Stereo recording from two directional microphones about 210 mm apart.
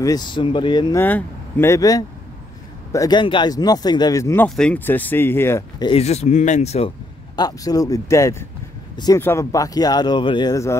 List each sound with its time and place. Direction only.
0.0 s speech: 20° left (ahead or behind)
1.0 s speech: 10° left (ahead or behind)
5.9 s speech: 30° left (ahead or behind)
7.3 s speech: 15° left (ahead or behind)